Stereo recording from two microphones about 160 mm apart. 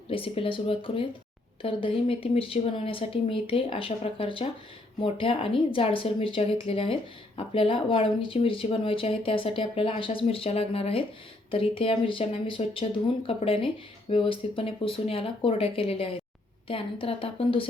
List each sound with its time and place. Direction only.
0.1 s speech: 35° left (ahead or behind)